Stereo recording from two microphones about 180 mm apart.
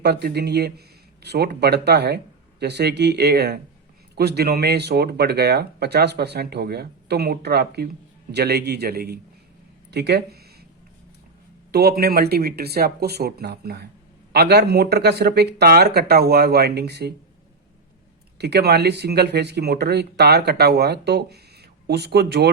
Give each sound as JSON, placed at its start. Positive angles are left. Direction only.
{"t": 0.0, "sound": "speech", "side_deg": -60}
{"t": 9.9, "sound": "a sound", "side_deg": -65}
{"t": 11.7, "sound": "speech", "side_deg": -60}
{"t": 18.3, "sound": "speech", "side_deg": -65}